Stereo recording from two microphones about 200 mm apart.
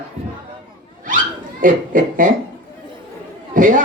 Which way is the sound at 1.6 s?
40° right (ahead or behind).